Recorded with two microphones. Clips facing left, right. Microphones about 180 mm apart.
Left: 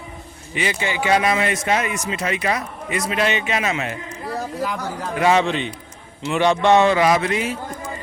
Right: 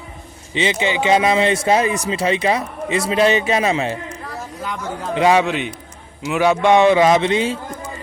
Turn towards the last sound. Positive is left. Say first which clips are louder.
# right 4 dB
turn(degrees=-25)  # may be behind; listen again after turning